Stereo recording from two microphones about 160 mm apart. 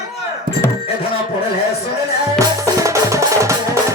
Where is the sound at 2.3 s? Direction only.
20° right (ahead or behind).